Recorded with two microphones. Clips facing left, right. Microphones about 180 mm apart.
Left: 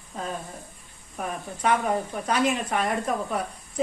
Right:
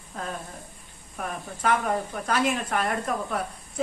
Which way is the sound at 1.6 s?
Centre (ahead or behind).